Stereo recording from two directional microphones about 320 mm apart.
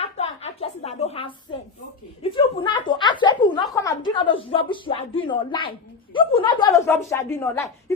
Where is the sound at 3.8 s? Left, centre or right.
Centre.